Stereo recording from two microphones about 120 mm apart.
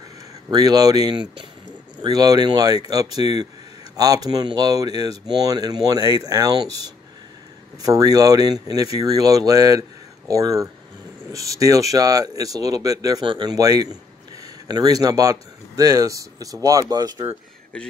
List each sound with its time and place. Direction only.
0.5 s speech: 35° right (ahead or behind)
7.8 s speech: 30° right (ahead or behind)
13.2 s a man's voice: 40° right (ahead or behind)
17.7 s speech: 10° left (ahead or behind)